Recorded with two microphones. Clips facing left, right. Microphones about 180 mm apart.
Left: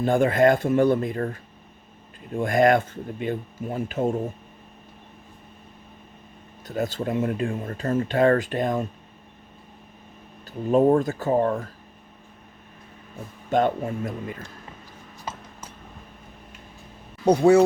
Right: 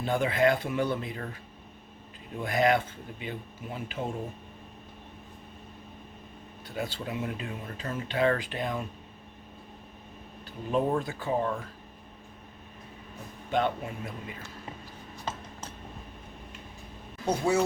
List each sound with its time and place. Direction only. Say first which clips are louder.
0.0 s speech: left 7 dB; 45° left (ahead or behind)
6.7 s speech: left 8 dB; 45° left (ahead or behind)
10.7 s speech: left 9 dB; 45° left (ahead or behind)
13.5 s speech: left 6 dB; 45° left (ahead or behind)
17.2 s speech: left 11 dB; 65° left (ahead or behind)